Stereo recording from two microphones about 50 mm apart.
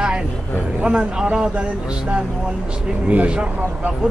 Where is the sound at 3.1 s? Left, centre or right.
Right.